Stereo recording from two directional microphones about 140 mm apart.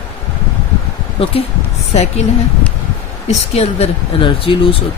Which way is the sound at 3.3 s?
50° left (ahead or behind).